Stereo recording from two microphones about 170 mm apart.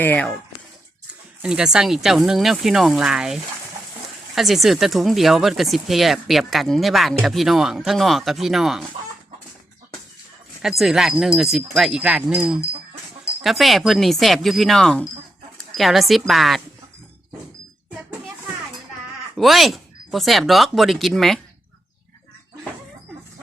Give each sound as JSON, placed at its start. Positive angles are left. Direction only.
{"t": 0.0, "sound": "speech", "side_deg": 10}
{"t": 1.4, "sound": "speech", "side_deg": -5}
{"t": 10.6, "sound": "speech", "side_deg": 0}
{"t": 19.4, "sound": "speech", "side_deg": 0}